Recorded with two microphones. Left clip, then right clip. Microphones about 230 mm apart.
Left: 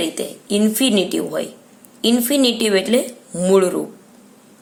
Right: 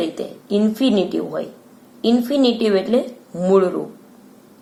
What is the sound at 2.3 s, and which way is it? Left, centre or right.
A woman's voice, left.